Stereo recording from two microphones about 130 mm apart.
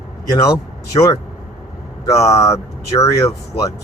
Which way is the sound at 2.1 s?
25° left (ahead or behind).